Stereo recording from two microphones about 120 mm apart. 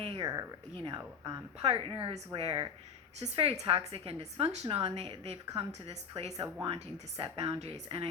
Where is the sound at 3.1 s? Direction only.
55° right (ahead or behind).